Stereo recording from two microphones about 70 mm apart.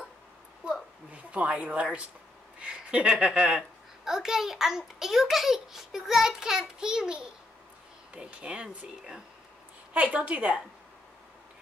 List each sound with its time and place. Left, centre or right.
0.6 s a sound: centre
1.1 s a child's voice: centre
9.9 s a woman's voice: centre